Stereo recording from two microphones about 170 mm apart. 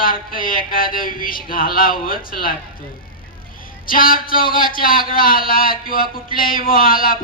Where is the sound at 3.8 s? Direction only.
55° left (ahead or behind).